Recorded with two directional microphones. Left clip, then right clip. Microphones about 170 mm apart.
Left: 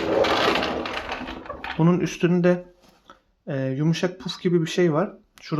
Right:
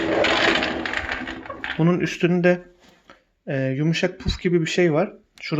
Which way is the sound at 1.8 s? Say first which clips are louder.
Right 1 dB; 5° right (ahead or behind).